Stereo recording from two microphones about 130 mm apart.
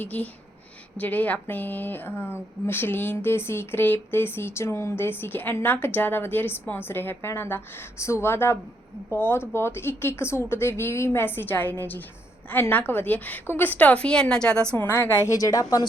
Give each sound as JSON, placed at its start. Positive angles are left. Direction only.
{"t": 0.0, "sound": "a woman's voice", "side_deg": 10}